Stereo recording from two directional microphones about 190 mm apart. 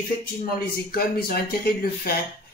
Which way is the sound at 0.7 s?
55° left (ahead or behind).